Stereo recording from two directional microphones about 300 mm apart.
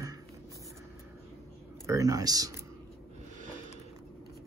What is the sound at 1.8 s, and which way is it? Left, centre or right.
Speech, centre.